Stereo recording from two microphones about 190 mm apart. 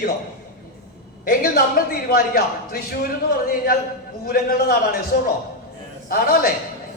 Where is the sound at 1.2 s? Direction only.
50° left (ahead or behind).